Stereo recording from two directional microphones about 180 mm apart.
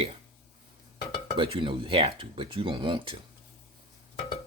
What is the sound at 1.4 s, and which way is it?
Speech, 30° right (ahead or behind).